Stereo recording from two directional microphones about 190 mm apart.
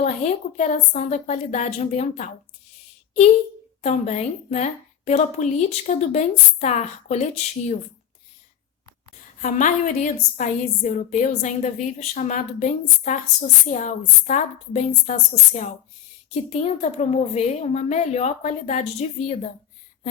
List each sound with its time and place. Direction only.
0.0 s a woman's voice: 35° left (ahead or behind)
3.8 s a woman's voice: 35° left (ahead or behind)
9.4 s a woman's voice: 40° left (ahead or behind)